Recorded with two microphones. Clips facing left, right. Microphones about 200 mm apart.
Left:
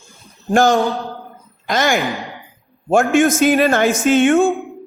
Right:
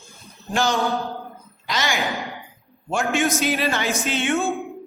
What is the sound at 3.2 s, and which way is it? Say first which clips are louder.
Speech: left 8 dB; 50° left (ahead or behind).